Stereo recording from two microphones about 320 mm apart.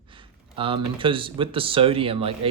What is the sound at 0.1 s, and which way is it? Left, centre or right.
A man's voice, centre.